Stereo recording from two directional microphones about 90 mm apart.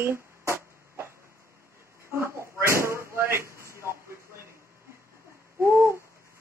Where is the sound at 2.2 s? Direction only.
30° right (ahead or behind).